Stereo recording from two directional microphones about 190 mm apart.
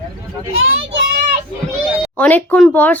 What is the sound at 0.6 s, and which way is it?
Speech, 85° right.